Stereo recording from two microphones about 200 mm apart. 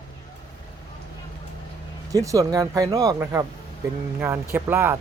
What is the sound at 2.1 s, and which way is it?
Speech, 15° right (ahead or behind).